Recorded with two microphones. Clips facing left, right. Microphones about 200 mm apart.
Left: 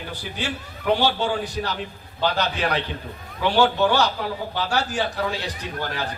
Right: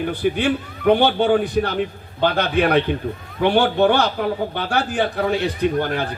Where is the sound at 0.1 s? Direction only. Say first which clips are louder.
Right 9 dB; 55° right (ahead or behind).